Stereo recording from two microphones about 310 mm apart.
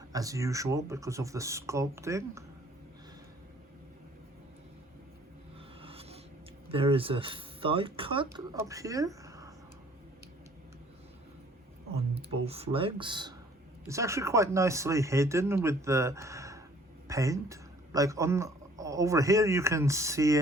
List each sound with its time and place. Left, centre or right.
0.1 s speech: centre
5.8 s a sound: centre
6.7 s speech: centre
12.3 s speech: centre